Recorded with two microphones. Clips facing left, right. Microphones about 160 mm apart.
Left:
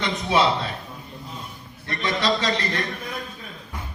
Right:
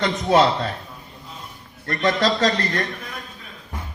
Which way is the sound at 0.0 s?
45° right (ahead or behind).